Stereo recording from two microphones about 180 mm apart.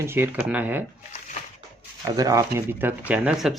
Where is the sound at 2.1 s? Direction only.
20° right (ahead or behind); by 3.6 s 5° right (ahead or behind).